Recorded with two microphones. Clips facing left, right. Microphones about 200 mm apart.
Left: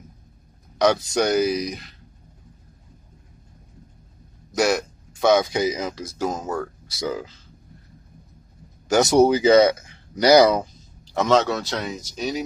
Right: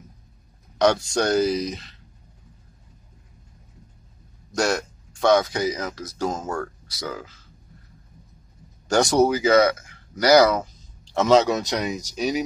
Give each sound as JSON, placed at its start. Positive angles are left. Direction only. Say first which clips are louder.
{"t": 0.7, "sound": "speech", "louder": "even", "side_deg": 5}
{"t": 4.6, "sound": "speech", "louder": "left 2 dB", "side_deg": 5}
{"t": 8.8, "sound": "speech", "louder": "left 2 dB", "side_deg": 5}
{"t": 9.2, "sound": "speech", "louder": "left 3 dB", "side_deg": 20}
{"t": 11.1, "sound": "speech", "louder": "right 2 dB", "side_deg": -5}
{"t": 11.4, "sound": "speech", "louder": "right 2 dB", "side_deg": -15}